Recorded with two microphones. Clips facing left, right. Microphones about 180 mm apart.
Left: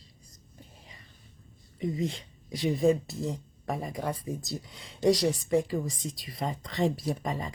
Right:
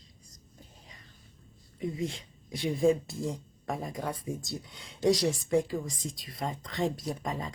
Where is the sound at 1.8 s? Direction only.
Centre (ahead or behind).